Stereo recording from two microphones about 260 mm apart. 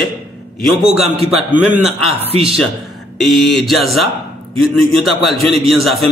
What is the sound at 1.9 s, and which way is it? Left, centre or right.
Speech, right.